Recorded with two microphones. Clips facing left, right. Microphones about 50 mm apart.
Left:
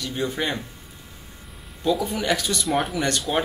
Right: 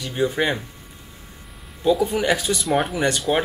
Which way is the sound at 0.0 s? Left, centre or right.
Centre.